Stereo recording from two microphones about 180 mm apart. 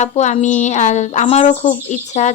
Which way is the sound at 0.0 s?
40° left (ahead or behind).